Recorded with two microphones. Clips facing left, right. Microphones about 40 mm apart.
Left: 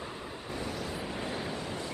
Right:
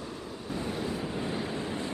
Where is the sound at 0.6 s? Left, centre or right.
Right.